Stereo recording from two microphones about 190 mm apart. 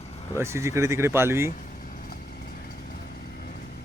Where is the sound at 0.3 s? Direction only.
15° right (ahead or behind).